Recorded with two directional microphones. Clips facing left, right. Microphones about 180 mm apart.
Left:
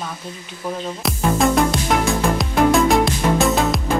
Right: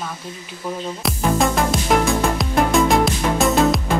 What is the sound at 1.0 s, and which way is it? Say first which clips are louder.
Music: left 1 dB; centre (ahead or behind).